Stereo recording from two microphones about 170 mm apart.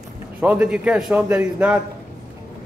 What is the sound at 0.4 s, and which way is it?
A man's voice, 5° right (ahead or behind).